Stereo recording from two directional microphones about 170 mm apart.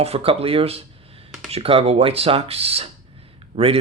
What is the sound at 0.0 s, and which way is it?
Speech, 35° right (ahead or behind).